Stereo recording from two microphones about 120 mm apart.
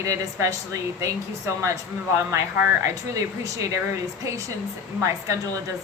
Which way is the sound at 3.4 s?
25° right (ahead or behind).